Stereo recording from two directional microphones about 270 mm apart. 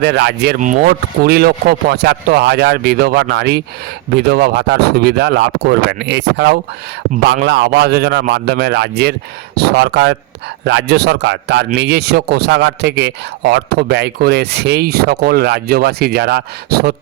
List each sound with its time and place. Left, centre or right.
0.0 s speech: right